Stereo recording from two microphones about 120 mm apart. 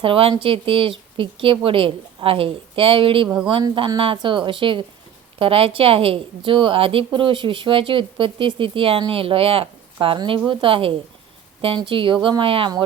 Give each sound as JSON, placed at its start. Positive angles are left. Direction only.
{"t": 0.0, "sound": "a woman's voice", "side_deg": -50}